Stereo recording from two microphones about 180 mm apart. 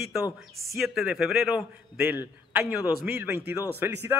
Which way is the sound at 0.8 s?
Centre (ahead or behind).